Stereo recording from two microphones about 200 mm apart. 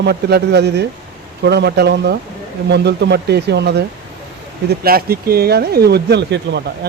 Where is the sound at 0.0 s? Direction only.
55° right (ahead or behind).